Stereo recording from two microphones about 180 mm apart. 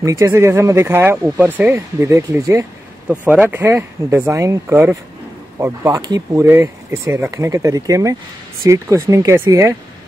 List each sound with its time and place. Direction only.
0.0 s speech: 15° right (ahead or behind)